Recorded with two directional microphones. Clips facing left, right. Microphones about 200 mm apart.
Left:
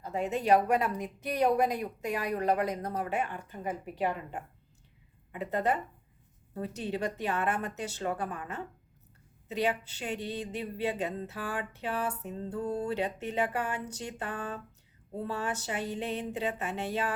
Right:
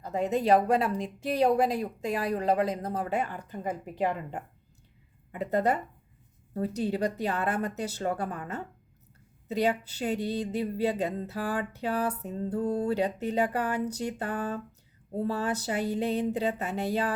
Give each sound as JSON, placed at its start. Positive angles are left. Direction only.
{"t": 0.0, "sound": "a woman's voice", "side_deg": -40}